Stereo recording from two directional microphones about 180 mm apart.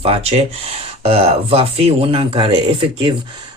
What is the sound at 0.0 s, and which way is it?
Speech, 35° right (ahead or behind).